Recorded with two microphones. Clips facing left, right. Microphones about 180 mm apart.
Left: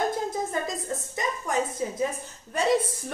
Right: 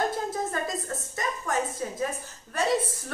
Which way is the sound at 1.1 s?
20° left (ahead or behind).